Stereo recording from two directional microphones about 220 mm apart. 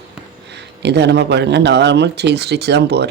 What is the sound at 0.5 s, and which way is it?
Speech, 50° right (ahead or behind).